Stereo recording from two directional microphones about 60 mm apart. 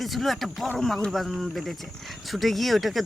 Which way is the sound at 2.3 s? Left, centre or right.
Centre.